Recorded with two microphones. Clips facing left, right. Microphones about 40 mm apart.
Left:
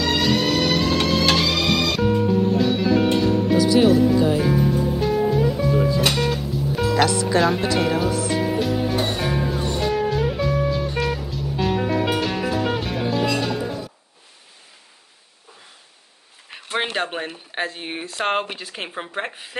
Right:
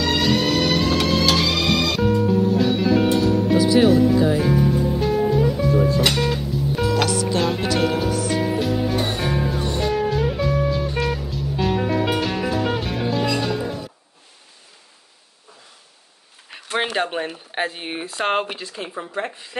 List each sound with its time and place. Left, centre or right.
0.0 s music: centre
16.4 s a sound: centre
16.9 s speech: centre
17.6 s speech: centre